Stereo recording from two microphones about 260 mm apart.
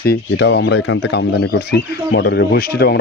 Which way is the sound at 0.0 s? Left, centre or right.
Left.